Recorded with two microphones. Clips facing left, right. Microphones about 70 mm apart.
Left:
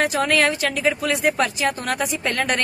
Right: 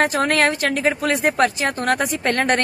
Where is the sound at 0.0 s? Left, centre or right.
Right.